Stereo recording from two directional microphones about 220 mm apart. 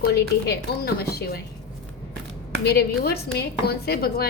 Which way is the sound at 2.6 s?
45° left (ahead or behind).